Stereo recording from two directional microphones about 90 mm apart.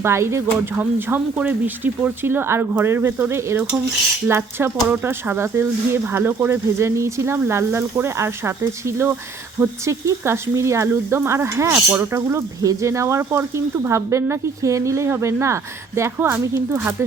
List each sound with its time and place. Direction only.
0.0 s speech: 30° right (ahead or behind)